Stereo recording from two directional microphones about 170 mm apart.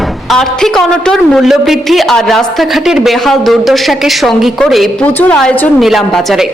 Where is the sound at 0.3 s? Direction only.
5° left (ahead or behind).